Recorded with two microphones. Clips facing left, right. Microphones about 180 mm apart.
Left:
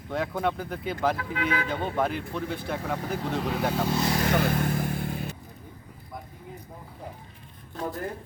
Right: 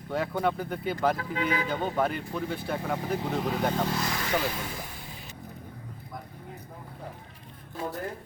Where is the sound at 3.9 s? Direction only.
25° left (ahead or behind).